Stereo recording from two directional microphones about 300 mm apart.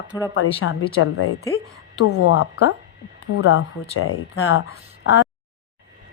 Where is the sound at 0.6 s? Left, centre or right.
Left.